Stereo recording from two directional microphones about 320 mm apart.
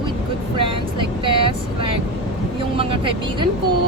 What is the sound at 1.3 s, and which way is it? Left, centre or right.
Speech, centre.